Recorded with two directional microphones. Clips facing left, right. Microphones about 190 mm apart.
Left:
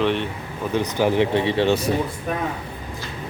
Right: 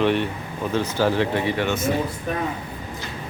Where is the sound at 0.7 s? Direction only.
15° left (ahead or behind); by 1.9 s 35° left (ahead or behind).